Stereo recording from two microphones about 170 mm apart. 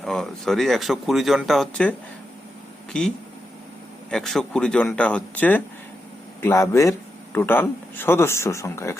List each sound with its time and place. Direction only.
0.0 s speech: centre (ahead or behind)
4.1 s speech: centre (ahead or behind)